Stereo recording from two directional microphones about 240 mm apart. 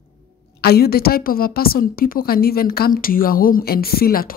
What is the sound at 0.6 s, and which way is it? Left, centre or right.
Speech, left.